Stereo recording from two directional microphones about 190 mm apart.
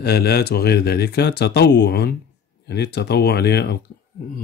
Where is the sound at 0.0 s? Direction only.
55° left (ahead or behind).